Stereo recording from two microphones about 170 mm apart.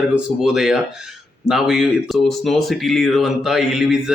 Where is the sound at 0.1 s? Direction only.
5° right (ahead or behind).